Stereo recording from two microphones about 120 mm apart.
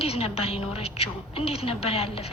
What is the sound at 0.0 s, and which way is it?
A woman's voice, 55° left (ahead or behind).